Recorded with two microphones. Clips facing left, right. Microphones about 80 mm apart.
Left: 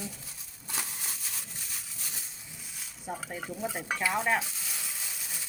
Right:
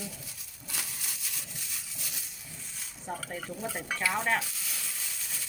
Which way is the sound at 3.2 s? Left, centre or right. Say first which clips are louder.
Left 1 dB; centre.